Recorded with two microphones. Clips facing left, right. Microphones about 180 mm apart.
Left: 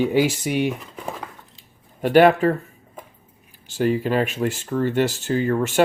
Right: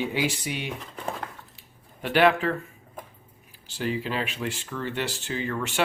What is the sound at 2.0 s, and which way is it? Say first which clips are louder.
Speech: left 7 dB; 45° left (ahead or behind).